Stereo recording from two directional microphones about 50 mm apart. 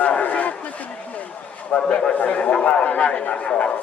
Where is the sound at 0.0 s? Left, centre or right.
Left.